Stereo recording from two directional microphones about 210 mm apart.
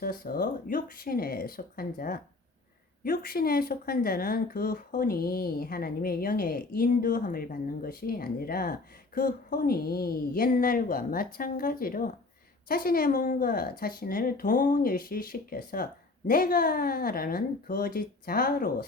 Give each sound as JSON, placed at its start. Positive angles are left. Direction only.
{"t": 0.0, "sound": "speech", "side_deg": 45}